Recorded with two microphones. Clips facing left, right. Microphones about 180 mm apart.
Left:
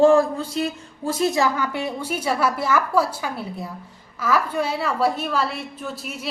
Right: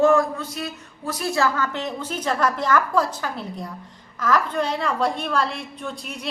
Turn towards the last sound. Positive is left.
turn(degrees=5)  # may be behind; listen again after turning